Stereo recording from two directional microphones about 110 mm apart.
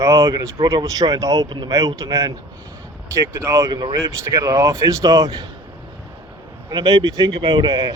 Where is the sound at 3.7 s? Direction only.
45° right (ahead or behind).